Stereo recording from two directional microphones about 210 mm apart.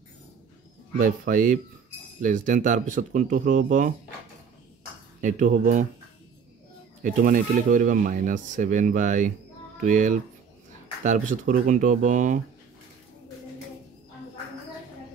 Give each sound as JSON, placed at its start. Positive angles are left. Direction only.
{"t": 0.9, "sound": "speech", "side_deg": -40}
{"t": 5.2, "sound": "speech", "side_deg": -35}
{"t": 7.0, "sound": "speech", "side_deg": -40}